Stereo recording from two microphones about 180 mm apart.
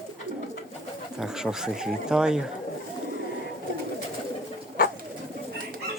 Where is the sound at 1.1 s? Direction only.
5° right (ahead or behind).